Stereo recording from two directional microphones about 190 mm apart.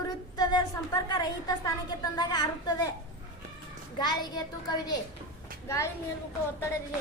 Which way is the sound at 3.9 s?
20° left (ahead or behind).